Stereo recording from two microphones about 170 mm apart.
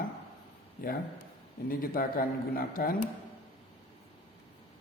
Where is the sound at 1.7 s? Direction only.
55° left (ahead or behind).